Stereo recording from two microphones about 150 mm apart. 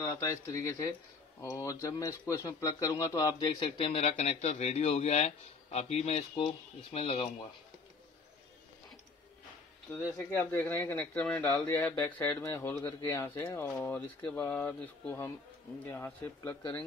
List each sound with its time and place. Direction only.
0.6 s a man's voice: 20° left (ahead or behind); by 7.4 s 45° left (ahead or behind)
9.8 s speech: 15° left (ahead or behind)
13.3 s speech: 30° left (ahead or behind)
13.6 s speech: 15° left (ahead or behind)